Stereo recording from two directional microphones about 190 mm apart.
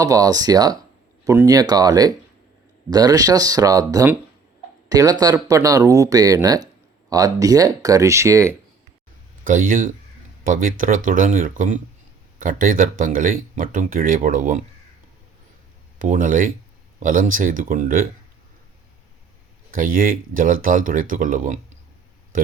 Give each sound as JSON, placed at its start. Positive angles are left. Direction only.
{"t": 0.0, "sound": "speech", "side_deg": -20}
{"t": 9.4, "sound": "speech", "side_deg": -45}
{"t": 16.0, "sound": "speech", "side_deg": -45}
{"t": 19.7, "sound": "speech", "side_deg": -45}